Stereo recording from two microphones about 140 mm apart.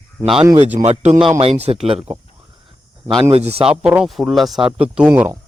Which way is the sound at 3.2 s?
50° right (ahead or behind).